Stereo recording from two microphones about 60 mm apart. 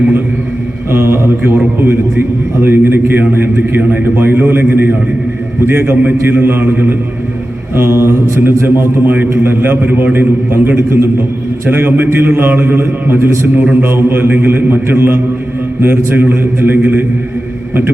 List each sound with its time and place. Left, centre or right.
0.9 s mantra: right
1.8 s a man's voice: right